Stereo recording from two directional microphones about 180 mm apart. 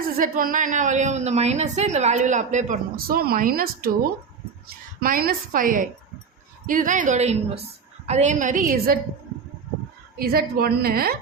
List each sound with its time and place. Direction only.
0.2 s a woman's voice: 50° right (ahead or behind)
4.9 s a woman's voice: 55° right (ahead or behind)
10.2 s a woman's voice: 55° right (ahead or behind)